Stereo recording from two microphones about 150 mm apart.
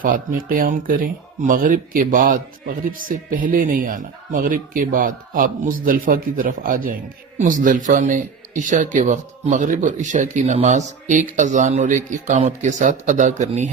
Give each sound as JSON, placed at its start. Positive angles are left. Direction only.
{"t": 0.0, "sound": "speech", "side_deg": -70}